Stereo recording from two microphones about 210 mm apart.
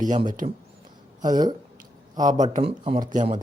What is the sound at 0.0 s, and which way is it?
Speech, 35° right (ahead or behind).